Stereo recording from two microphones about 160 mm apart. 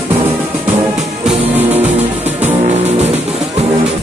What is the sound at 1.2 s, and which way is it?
Music, 5° right (ahead or behind).